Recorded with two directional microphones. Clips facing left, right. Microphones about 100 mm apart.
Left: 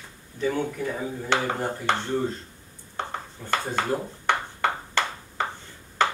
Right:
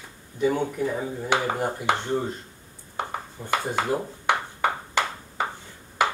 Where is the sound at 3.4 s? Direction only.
20° right (ahead or behind).